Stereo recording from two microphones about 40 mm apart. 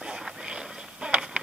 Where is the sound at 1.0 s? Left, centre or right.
Right.